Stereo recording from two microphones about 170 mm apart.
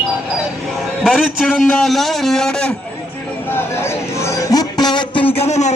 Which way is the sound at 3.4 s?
15° left (ahead or behind).